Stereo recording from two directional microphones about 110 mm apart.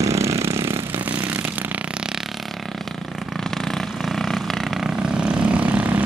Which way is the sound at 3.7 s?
5° left (ahead or behind).